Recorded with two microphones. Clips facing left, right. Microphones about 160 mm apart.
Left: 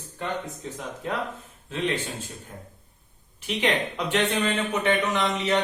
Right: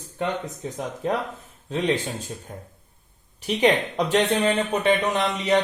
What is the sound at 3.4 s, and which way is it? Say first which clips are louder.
A man's voice: right 5 dB; 40° right (ahead or behind).